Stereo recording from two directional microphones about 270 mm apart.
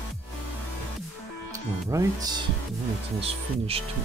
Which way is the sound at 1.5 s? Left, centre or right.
Centre.